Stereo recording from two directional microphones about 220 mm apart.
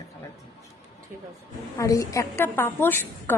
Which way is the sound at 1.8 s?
15° left (ahead or behind).